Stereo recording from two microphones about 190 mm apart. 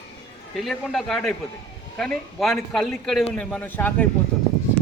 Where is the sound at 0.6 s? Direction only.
Centre (ahead or behind).